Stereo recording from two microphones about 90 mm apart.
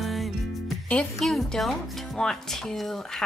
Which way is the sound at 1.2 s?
Centre (ahead or behind).